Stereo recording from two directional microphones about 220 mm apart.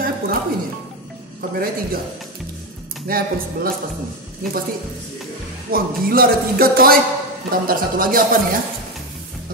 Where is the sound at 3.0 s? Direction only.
40° right (ahead or behind).